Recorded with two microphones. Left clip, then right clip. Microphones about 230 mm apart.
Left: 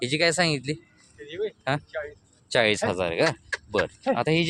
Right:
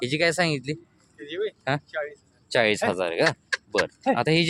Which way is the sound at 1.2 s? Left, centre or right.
Right.